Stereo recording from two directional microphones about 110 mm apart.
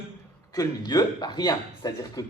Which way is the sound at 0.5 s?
35° left (ahead or behind).